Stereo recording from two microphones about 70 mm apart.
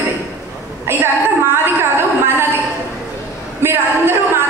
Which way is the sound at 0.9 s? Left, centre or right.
Right.